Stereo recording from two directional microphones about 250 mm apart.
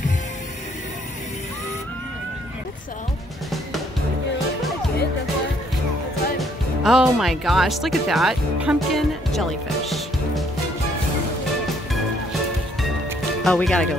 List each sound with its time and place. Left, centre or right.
6.3 s speech: centre
13.4 s speech: centre